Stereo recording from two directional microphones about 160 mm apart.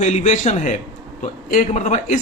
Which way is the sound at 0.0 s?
45° left (ahead or behind).